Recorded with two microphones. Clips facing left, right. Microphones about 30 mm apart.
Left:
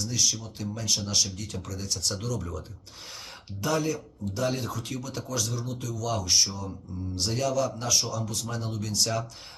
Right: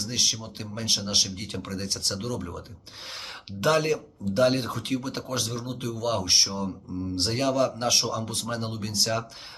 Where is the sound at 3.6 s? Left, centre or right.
Right.